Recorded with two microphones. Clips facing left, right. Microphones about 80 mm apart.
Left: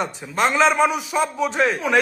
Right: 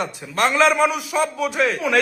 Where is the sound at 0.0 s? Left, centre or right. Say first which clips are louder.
Even; centre.